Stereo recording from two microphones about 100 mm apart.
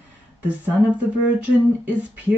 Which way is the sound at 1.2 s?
15° right (ahead or behind).